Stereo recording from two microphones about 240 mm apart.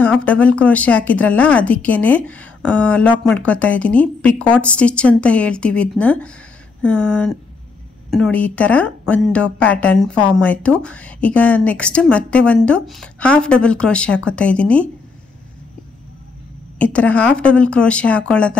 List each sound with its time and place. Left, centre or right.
0.0 s speech: centre
16.7 s speech: centre